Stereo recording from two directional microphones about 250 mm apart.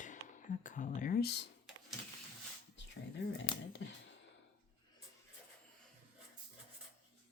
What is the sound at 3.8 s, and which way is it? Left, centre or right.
Speech, left.